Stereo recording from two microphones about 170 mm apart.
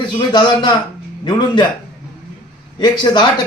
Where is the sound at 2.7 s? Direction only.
25° left (ahead or behind).